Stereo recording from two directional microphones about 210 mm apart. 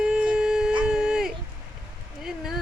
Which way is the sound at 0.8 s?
5° right (ahead or behind).